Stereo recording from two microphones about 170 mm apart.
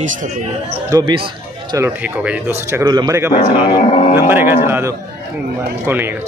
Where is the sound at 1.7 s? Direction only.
10° right (ahead or behind).